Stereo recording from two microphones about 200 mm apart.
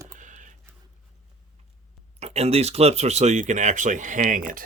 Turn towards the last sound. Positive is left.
turn(degrees=-40)  # may be behind; listen again after turning